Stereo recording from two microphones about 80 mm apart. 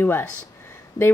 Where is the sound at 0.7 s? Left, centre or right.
Left.